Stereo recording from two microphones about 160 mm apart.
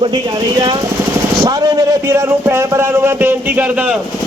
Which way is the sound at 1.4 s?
20° right (ahead or behind).